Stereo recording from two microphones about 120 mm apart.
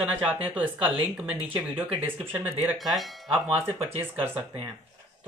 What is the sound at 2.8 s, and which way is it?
Speech, centre (ahead or behind).